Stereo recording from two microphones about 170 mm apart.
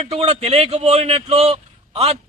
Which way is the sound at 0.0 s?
40° right (ahead or behind).